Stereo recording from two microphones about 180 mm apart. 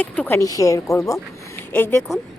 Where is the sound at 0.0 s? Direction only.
10° left (ahead or behind).